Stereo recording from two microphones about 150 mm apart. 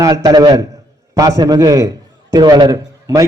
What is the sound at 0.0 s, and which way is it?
A man's voice, 25° right (ahead or behind).